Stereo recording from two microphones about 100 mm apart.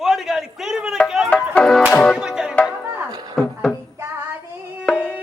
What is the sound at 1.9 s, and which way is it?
Music, 10° left (ahead or behind).